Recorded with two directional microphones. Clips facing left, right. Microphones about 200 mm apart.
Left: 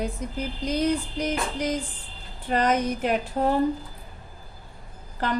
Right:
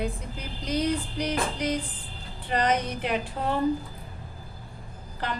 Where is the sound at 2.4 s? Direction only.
45° left (ahead or behind).